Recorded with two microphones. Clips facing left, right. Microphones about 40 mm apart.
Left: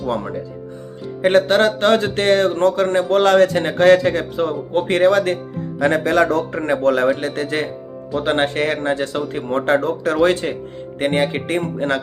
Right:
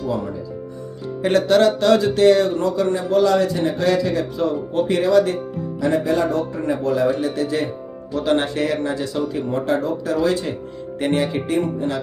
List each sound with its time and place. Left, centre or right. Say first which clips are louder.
0.0 s a man's voice: left 2 dB; left
1.2 s speech: left 1 dB; left
5.8 s a man's voice: left 3 dB; left
8.1 s speech: left 1 dB; left